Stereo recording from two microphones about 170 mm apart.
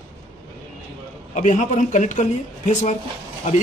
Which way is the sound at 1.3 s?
45° left (ahead or behind).